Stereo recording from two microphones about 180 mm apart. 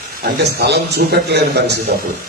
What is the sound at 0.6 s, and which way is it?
A man's voice, 65° right (ahead or behind).